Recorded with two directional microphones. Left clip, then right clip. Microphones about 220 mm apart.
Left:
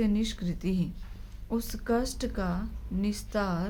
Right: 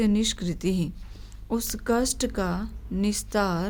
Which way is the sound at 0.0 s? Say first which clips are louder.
Right 5 dB; 50° right (ahead or behind).